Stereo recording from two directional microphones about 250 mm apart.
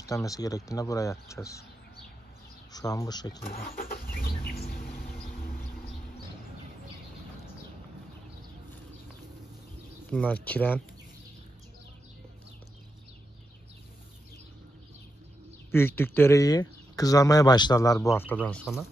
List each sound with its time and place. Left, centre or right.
0.0 s speech: centre
2.7 s speech: centre
3.4 s vehicle: left
10.0 s speech: centre
15.7 s speech: centre